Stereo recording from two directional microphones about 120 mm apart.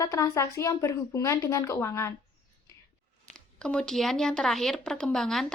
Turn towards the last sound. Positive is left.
turn(degrees=5)  # may be behind; listen again after turning